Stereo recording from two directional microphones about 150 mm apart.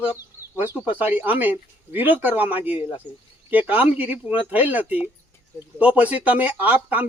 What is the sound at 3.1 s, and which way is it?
Speech, 30° left (ahead or behind).